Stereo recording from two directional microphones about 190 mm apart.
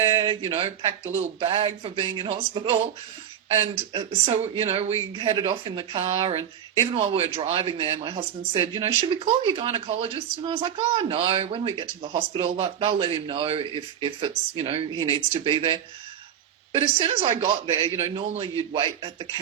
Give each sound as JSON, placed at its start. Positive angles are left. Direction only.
{"t": 0.0, "sound": "speech", "side_deg": -20}